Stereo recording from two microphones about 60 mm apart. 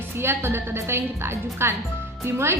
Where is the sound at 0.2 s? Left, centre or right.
Right.